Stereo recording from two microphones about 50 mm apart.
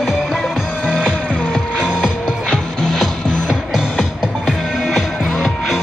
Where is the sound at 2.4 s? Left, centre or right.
Centre.